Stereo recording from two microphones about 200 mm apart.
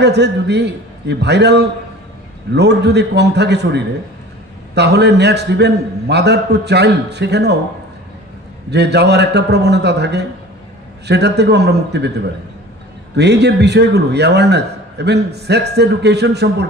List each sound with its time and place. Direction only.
0.0 s a man's voice: 55° right (ahead or behind)
8.6 s a man's voice: 55° right (ahead or behind)
13.1 s a man's voice: 55° right (ahead or behind)